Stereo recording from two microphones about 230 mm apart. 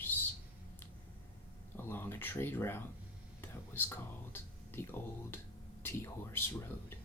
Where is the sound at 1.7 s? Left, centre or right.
Centre.